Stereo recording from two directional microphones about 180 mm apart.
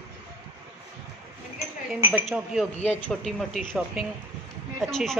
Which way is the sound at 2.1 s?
Centre (ahead or behind).